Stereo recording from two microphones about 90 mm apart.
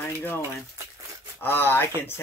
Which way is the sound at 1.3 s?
25° left (ahead or behind).